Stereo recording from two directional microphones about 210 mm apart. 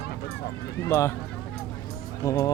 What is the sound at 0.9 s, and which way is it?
Speech, 15° left (ahead or behind).